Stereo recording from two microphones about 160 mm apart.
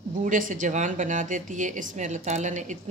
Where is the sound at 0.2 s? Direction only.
55° right (ahead or behind).